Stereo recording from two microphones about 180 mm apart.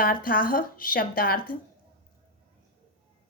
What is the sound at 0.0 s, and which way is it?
A woman's voice, 50° left (ahead or behind).